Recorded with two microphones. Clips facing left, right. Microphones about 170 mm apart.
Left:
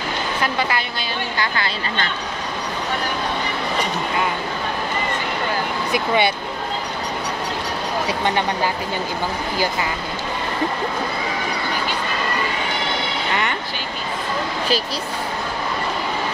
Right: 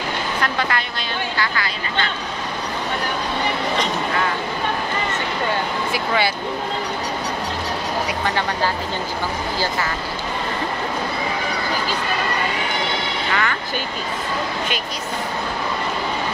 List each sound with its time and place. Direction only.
0.6 s a woman's voice: 5° left (ahead or behind)
5.9 s speech: 20° left (ahead or behind)
13.3 s speech: 20° left (ahead or behind)